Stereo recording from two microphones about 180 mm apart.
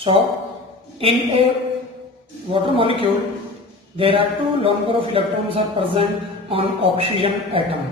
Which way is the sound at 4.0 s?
30° right (ahead or behind).